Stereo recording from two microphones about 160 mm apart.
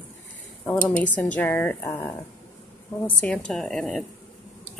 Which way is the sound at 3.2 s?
5° left (ahead or behind).